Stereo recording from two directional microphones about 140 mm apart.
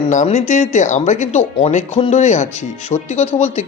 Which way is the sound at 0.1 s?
60° left (ahead or behind).